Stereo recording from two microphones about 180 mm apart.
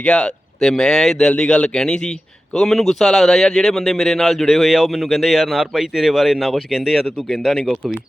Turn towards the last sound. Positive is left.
turn(degrees=5)  # may be behind; listen again after turning